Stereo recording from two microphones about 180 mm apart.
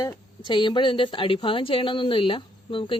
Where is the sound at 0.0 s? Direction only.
25° left (ahead or behind).